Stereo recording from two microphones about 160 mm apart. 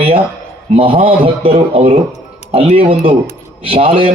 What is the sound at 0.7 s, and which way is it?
A man's voice, 35° right (ahead or behind).